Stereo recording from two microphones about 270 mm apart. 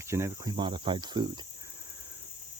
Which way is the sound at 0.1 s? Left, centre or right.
Centre.